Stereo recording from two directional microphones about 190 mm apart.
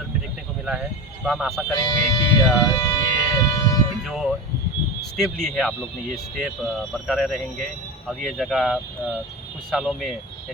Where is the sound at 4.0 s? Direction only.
Centre (ahead or behind).